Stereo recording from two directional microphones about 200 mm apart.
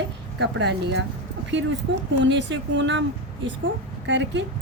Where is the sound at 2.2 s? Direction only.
65° right (ahead or behind).